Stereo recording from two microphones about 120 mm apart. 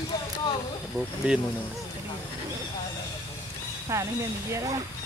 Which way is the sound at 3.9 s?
25° right (ahead or behind).